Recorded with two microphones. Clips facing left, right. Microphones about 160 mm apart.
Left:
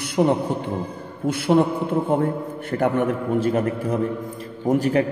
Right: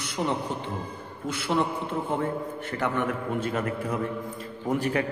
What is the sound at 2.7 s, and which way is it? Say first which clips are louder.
A man's voice: left 7 dB; 45° left (ahead or behind).